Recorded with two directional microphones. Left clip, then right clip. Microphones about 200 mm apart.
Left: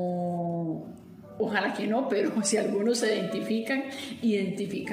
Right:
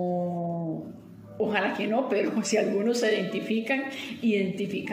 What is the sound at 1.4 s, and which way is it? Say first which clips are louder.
A woman's voice: right 1 dB; 10° left (ahead or behind).